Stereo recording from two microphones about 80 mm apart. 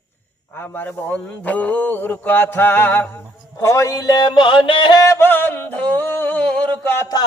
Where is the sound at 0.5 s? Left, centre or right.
Left.